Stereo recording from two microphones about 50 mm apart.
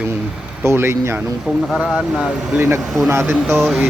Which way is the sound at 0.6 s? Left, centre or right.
Right.